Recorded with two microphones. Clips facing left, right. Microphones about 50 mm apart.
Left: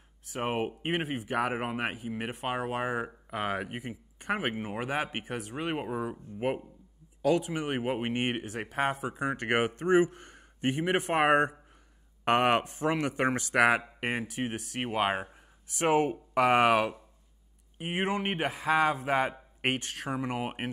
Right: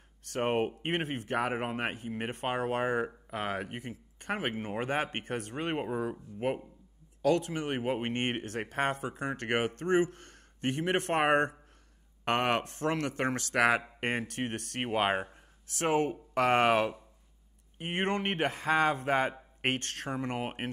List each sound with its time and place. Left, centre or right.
0.3 s speech: centre
15.2 s speech: left; by 20.7 s centre